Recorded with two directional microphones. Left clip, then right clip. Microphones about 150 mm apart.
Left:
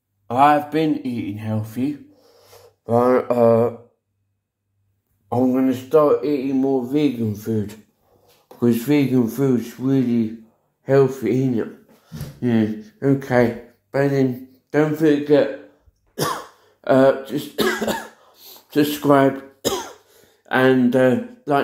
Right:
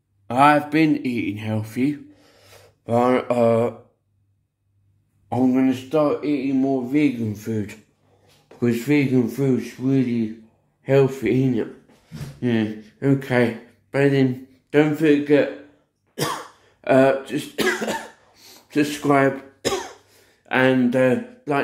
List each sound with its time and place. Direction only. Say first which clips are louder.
0.3 s speech: left 1 dB; 25° right (ahead or behind)
1.9 s gasp: right 2 dB; 50° right (ahead or behind)
2.3 s a sound: left 2 dB; 15° right (ahead or behind)
5.4 s speech: even; 5° right (ahead or behind)
10.8 s a sound: left 2 dB; centre (ahead or behind)
11.2 s speech: even; centre (ahead or behind)
14.7 s speech: even; centre (ahead or behind)
16.8 s speech: left 1 dB; centre (ahead or behind)
17.8 s cough: left 2 dB; 10° left (ahead or behind)
19.0 s speech: left 3 dB; centre (ahead or behind)